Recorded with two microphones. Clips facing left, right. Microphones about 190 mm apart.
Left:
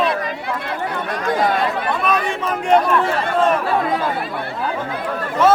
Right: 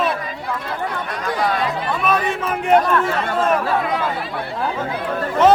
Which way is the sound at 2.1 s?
Centre (ahead or behind).